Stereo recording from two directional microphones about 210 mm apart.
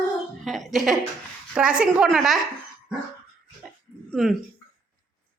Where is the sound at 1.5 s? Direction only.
5° right (ahead or behind).